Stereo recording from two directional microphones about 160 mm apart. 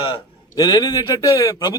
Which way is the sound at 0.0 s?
25° left (ahead or behind).